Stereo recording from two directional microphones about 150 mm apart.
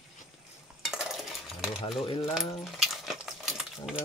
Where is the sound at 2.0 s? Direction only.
35° left (ahead or behind).